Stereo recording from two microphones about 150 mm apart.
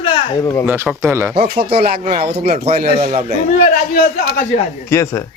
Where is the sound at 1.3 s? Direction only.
90° right.